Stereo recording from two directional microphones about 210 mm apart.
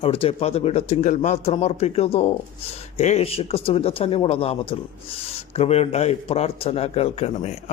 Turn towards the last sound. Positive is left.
turn(degrees=30)  # may be behind; listen again after turning